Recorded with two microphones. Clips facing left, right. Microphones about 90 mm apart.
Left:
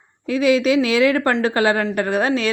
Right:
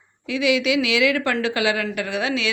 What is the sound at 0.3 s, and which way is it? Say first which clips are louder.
A woman's voice: left 4 dB; 45° left (ahead or behind).